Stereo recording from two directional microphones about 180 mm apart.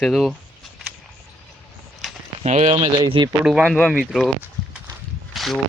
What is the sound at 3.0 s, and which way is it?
Speech, 25° right (ahead or behind).